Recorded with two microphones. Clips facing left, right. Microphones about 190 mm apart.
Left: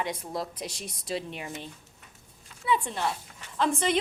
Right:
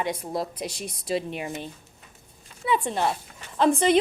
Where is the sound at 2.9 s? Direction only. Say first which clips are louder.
Right 5 dB; 55° right (ahead or behind).